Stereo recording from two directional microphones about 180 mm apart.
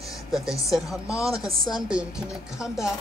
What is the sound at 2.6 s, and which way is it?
Speech, 5° right (ahead or behind).